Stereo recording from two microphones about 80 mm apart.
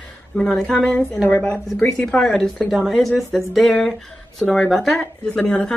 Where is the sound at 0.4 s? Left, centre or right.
Centre.